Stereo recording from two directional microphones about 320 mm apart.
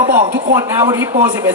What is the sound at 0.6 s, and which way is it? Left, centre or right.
Speech, centre.